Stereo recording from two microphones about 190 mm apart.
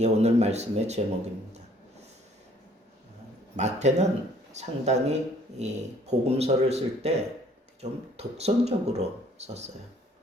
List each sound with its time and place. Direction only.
0.0 s speech: 35° right (ahead or behind)
3.5 s speech: 35° right (ahead or behind)